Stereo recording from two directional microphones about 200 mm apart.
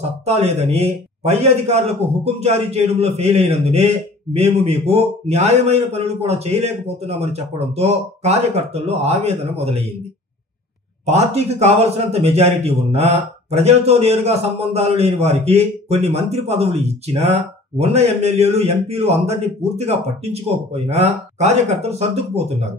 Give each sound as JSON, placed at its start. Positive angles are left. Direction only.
{"t": 0.2, "sound": "speech", "side_deg": -30}
{"t": 11.1, "sound": "speech", "side_deg": -30}